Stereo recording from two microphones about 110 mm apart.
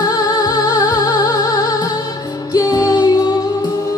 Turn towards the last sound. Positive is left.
turn(degrees=35)  # may be behind; listen again after turning